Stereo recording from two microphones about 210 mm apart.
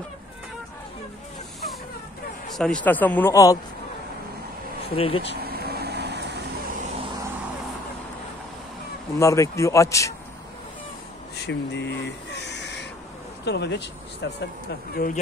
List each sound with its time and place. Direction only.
2.5 s speech: 5° left (ahead or behind)
4.8 s speech: 25° left (ahead or behind)
5.4 s vehicle: 45° right (ahead or behind)
9.2 s speech: 15° left (ahead or behind)
11.4 s a sound: 55° left (ahead or behind)
13.5 s speech: 55° left (ahead or behind)
15.0 s speech: 45° left (ahead or behind)